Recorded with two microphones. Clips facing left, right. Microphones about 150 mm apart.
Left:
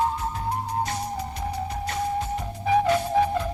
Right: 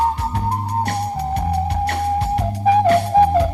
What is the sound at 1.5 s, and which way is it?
Music, 70° right (ahead or behind).